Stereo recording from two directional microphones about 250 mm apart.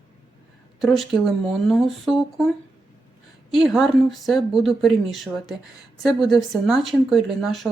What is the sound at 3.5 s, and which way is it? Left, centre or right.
Speech, centre.